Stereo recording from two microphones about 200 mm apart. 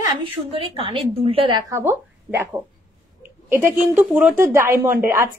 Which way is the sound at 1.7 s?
10° right (ahead or behind).